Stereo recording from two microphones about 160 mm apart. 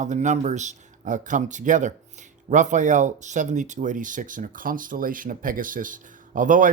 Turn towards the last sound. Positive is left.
turn(degrees=-55)  # may be behind; listen again after turning